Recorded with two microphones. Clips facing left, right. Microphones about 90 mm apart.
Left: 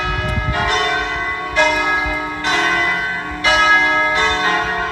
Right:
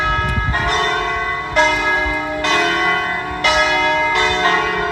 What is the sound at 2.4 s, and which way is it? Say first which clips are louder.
Church bell: right 1 dB; 70° right (ahead or behind).